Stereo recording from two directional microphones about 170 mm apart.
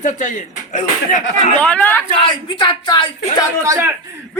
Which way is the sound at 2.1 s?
30° left (ahead or behind).